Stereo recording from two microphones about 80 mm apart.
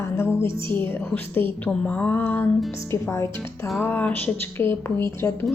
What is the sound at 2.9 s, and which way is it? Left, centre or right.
Speech, left.